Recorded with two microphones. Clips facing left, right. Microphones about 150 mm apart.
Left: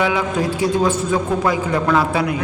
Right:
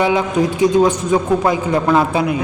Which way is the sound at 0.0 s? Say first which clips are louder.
Right 3 dB; 20° right (ahead or behind).